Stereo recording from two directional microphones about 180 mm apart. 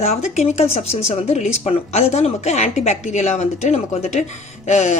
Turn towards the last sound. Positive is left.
turn(degrees=40)  # may be behind; listen again after turning